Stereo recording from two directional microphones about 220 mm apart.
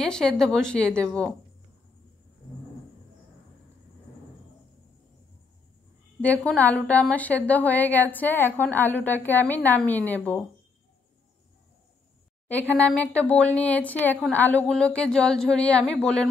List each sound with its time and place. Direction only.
0.0 s a woman's voice: 5° left (ahead or behind)
6.2 s a woman's voice: 5° left (ahead or behind)
12.7 s a woman's voice: 5° left (ahead or behind)